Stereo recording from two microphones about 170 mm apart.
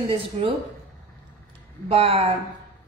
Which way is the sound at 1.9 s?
35° right (ahead or behind).